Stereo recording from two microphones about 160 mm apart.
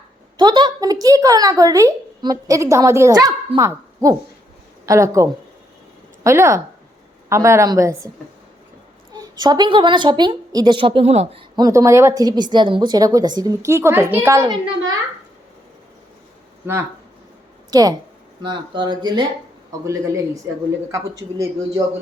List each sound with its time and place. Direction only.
0.3 s speech: 30° right (ahead or behind)
9.1 s speech: 25° right (ahead or behind); by 11.4 s 40° right (ahead or behind)
11.5 s speech: 20° right (ahead or behind)
14.4 s speech: 30° right (ahead or behind)
17.7 s speech: 25° right (ahead or behind)